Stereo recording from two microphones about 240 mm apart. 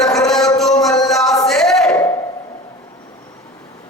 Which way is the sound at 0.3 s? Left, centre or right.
Centre.